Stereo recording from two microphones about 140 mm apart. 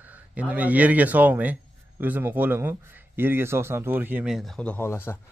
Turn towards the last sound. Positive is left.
turn(degrees=20)  # may be behind; listen again after turning